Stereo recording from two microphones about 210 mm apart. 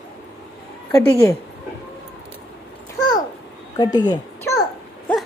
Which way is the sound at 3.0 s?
20° left (ahead or behind).